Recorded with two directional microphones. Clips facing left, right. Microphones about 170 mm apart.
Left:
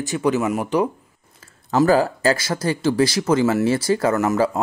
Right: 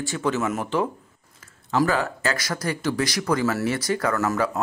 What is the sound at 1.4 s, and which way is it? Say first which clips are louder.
Speech: left 4 dB; 35° left (ahead or behind).